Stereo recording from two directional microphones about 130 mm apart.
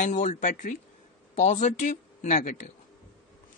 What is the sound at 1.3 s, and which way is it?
Speech, 65° left (ahead or behind).